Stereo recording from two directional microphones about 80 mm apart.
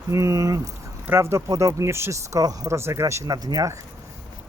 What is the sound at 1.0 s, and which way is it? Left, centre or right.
Speech, right.